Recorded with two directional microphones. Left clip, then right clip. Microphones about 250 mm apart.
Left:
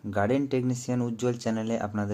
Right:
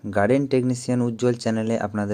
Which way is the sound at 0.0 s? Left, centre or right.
Centre.